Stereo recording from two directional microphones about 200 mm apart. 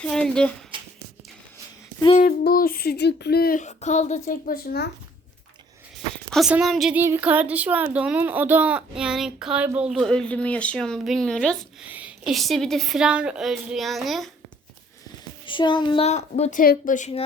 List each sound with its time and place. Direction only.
0.0 s a child's voice: 5° left (ahead or behind)
2.1 s speech: 45° left (ahead or behind)
6.3 s a child's voice: centre (ahead or behind)
11.9 s a child's voice: 5° right (ahead or behind)
15.4 s a woman's voice: 25° left (ahead or behind)